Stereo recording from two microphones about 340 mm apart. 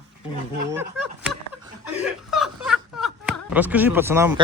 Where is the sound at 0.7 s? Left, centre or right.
Centre.